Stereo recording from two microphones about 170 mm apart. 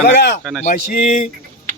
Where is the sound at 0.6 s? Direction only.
50° left (ahead or behind).